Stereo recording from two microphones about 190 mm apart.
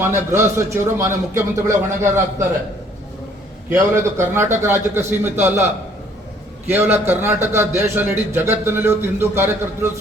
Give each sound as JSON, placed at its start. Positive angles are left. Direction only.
{"t": 0.3, "sound": "speech", "side_deg": -15}
{"t": 3.7, "sound": "speech", "side_deg": -15}